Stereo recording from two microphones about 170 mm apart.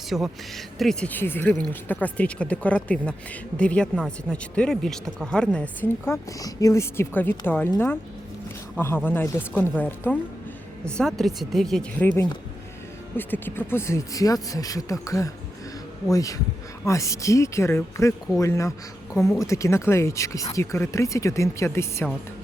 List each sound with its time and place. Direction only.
0.1 s speech: centre (ahead or behind)
8.7 s speech: 15° left (ahead or behind)